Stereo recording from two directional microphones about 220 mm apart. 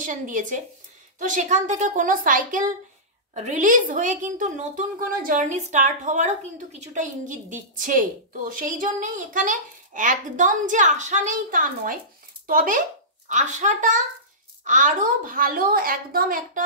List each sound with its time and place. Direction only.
0.0 s a woman's voice: 35° right (ahead or behind)